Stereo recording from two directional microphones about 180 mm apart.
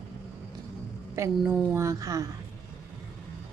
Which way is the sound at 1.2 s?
10° right (ahead or behind).